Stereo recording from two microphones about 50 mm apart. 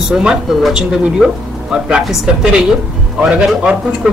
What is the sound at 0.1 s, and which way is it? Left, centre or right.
Speech, centre.